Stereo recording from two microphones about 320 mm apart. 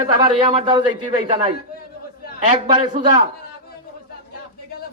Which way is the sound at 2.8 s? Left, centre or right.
Centre.